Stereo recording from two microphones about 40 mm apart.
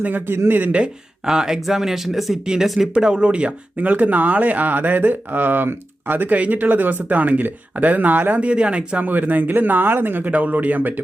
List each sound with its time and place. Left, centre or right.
0.3 s speech: right
1.2 s speech: centre
3.0 s speech: right
6.2 s speech: right
8.4 s speech: right
9.0 s speech: right
10.3 s speech: right